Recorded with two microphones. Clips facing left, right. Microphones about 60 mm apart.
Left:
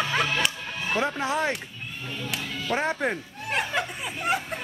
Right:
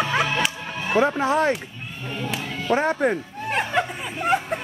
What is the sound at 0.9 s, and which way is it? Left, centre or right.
Sheep, right.